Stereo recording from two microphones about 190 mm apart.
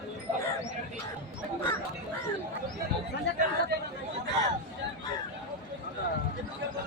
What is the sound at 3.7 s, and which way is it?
Chatter, 60° right (ahead or behind).